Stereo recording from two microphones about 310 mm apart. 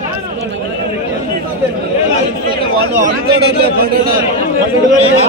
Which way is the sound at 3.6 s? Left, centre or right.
Right.